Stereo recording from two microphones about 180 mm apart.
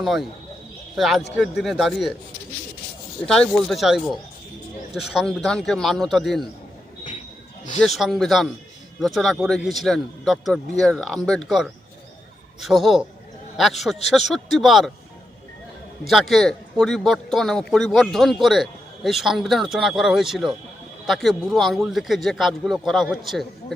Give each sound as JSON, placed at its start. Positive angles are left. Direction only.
{"t": 0.0, "sound": "a man's voice", "side_deg": 0}
{"t": 3.2, "sound": "a man's voice", "side_deg": 5}
{"t": 7.8, "sound": "a man's voice", "side_deg": 0}
{"t": 16.0, "sound": "a man's voice", "side_deg": 0}